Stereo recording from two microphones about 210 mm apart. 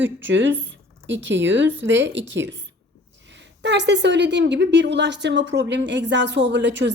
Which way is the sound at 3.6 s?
55° right (ahead or behind).